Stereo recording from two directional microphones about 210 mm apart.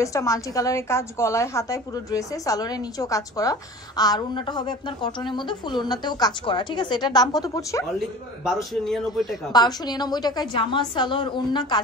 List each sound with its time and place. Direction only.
0.0 s a woman's voice: 15° left (ahead or behind)
8.5 s a man's voice: centre (ahead or behind)
9.5 s a woman's voice: 20° left (ahead or behind)